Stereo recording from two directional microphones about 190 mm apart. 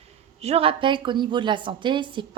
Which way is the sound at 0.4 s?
30° right (ahead or behind).